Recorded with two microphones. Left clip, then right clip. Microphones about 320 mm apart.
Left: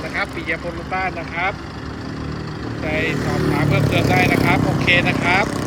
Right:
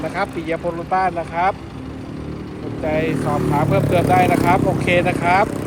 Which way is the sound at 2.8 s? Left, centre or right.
Centre.